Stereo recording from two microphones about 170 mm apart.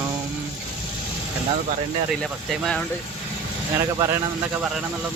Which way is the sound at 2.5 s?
5° left (ahead or behind).